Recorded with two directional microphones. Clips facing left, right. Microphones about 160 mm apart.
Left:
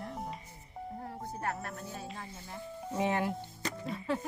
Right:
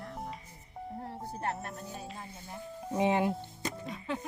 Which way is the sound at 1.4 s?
25° right (ahead or behind).